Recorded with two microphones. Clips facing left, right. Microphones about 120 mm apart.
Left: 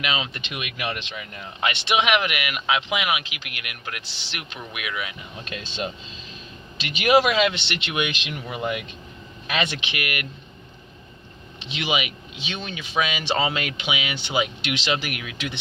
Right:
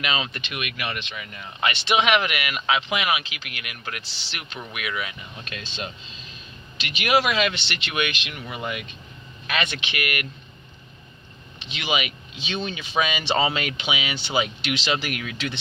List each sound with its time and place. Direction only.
0.0 s speech: 10° left (ahead or behind)
1.6 s speech: 10° left (ahead or behind)
7.0 s speech: 30° left (ahead or behind)
11.8 s speech: 15° left (ahead or behind)